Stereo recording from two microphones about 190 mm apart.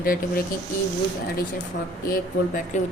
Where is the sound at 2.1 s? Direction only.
45° left (ahead or behind).